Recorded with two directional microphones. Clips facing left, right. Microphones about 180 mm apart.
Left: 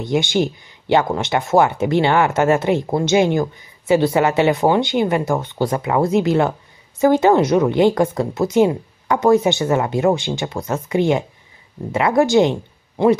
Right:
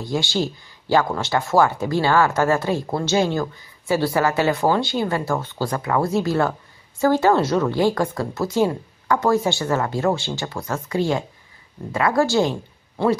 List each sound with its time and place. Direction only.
0.0 s speech: 20° left (ahead or behind)